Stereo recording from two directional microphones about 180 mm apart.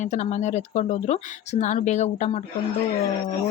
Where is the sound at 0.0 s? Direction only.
40° left (ahead or behind).